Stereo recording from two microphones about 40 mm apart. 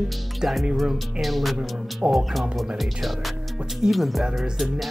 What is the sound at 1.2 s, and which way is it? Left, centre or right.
Music, centre.